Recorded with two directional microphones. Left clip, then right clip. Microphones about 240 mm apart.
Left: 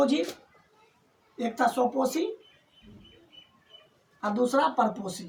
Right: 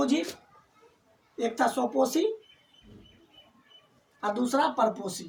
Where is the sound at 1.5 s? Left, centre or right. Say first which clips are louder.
Left 3 dB; centre.